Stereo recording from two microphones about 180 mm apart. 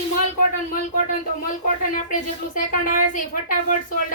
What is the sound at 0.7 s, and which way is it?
A woman's voice, 50° left (ahead or behind).